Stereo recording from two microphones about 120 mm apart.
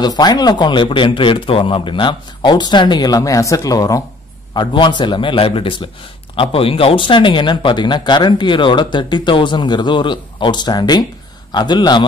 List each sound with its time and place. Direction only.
0.0 s speech: 35° left (ahead or behind)
4.6 s a man's voice: 40° left (ahead or behind)